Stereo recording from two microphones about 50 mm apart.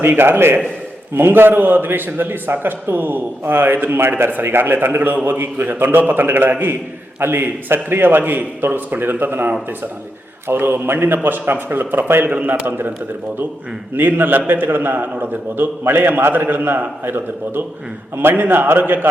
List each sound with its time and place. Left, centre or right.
0.1 s a man's voice: right
13.9 s a man's voice: right